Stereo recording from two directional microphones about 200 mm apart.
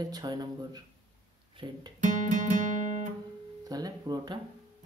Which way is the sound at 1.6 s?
25° right (ahead or behind).